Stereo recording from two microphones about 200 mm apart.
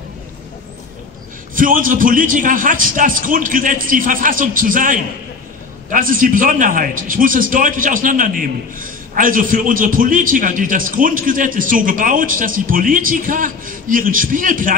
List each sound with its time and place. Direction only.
1.5 s a man's voice: 45° right (ahead or behind)